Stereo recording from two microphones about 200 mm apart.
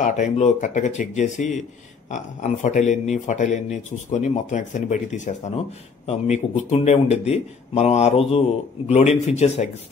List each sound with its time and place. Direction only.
0.0 s speech: 40° left (ahead or behind)